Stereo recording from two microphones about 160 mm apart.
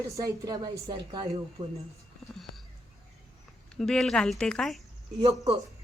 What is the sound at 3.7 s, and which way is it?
Speech, 5° left (ahead or behind).